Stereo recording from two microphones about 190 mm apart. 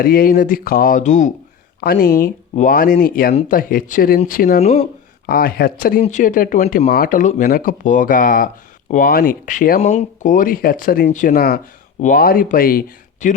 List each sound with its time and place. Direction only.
0.0 s speech: 50° left (ahead or behind)
1.8 s speech: 50° left (ahead or behind)
4.6 s speech: 35° left (ahead or behind)
5.2 s speech: 50° left (ahead or behind)
6.0 s speech: 40° left (ahead or behind)